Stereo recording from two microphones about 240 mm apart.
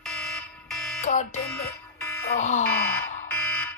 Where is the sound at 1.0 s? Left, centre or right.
Left.